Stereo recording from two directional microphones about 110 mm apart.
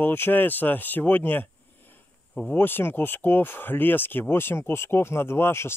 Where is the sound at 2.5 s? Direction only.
20° left (ahead or behind).